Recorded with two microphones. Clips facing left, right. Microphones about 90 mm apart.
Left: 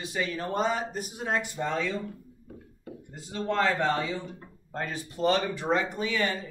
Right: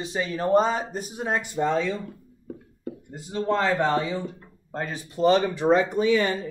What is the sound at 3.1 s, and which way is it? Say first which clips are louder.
Speech: right 3 dB; 20° right (ahead or behind).